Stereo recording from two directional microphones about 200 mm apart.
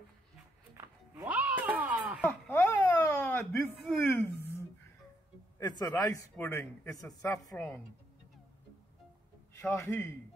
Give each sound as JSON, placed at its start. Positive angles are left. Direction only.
{"t": 0.7, "sound": "music", "side_deg": -10}
{"t": 2.2, "sound": "a sound", "side_deg": 10}
{"t": 5.6, "sound": "speech", "side_deg": 20}
{"t": 9.5, "sound": "a man's voice", "side_deg": 10}